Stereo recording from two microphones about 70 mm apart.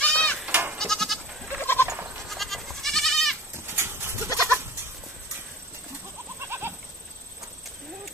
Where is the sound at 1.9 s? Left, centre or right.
Right.